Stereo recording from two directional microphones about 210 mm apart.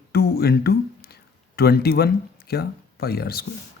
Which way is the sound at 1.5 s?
50° left (ahead or behind).